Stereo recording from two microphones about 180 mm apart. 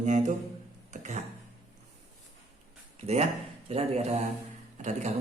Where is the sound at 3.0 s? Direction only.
35° right (ahead or behind).